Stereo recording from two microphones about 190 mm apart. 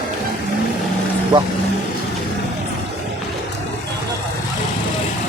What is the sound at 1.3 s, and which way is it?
Speech, 25° right (ahead or behind).